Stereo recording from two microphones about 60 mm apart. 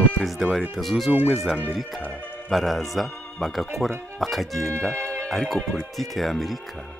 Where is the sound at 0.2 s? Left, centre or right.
Centre.